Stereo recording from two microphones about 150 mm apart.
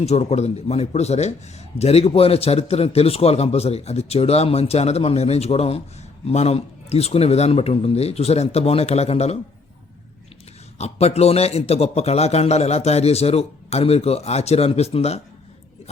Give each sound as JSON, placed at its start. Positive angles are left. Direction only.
{"t": 0.0, "sound": "a man's voice", "side_deg": 45}
{"t": 10.8, "sound": "a man's voice", "side_deg": 45}